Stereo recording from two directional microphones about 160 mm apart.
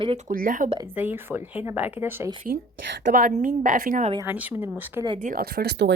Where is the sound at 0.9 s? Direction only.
10° right (ahead or behind).